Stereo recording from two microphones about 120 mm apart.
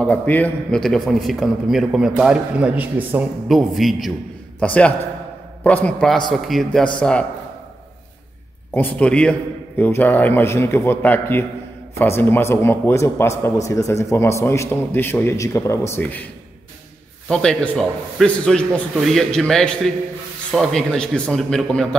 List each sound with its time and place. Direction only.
0.0 s a man's voice: 10° left (ahead or behind); by 3.3 s 15° right (ahead or behind)
3.4 s a man's voice: centre (ahead or behind)
4.6 s a man's voice: 10° left (ahead or behind)
8.7 s a man's voice: 10° left (ahead or behind)
17.3 s a man's voice: 5° left (ahead or behind)